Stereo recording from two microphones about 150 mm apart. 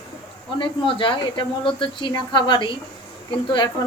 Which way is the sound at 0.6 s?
35° left (ahead or behind).